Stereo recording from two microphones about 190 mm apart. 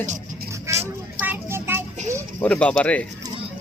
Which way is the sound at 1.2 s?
10° right (ahead or behind).